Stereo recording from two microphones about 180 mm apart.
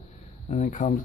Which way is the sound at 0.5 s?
45° left (ahead or behind).